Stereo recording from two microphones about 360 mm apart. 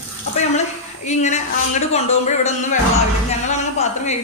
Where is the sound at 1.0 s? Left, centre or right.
Centre.